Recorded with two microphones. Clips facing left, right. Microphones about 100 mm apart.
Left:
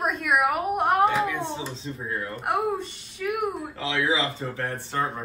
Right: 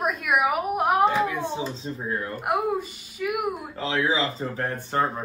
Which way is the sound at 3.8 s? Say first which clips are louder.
Right 1 dB; 35° right (ahead or behind).